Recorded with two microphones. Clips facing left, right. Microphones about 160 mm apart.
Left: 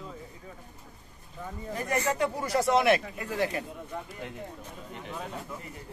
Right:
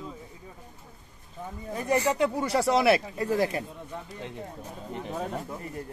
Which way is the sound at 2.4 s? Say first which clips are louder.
Right 1 dB; 30° right (ahead or behind).